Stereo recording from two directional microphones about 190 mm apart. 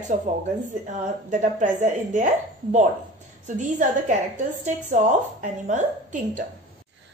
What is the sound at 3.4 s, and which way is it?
A woman's voice, 40° right (ahead or behind).